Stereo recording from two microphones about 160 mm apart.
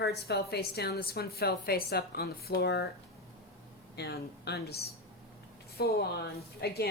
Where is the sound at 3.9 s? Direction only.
90° left.